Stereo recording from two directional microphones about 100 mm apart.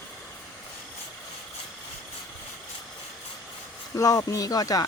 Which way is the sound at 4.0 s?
35° left (ahead or behind).